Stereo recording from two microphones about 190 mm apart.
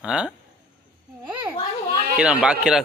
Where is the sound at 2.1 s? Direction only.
5° right (ahead or behind).